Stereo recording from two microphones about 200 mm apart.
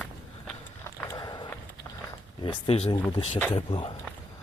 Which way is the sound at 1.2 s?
20° left (ahead or behind).